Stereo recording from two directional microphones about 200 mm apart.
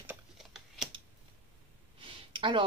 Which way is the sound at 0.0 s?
5° right (ahead or behind).